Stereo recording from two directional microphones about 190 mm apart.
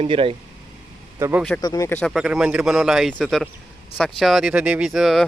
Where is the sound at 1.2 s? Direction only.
15° right (ahead or behind).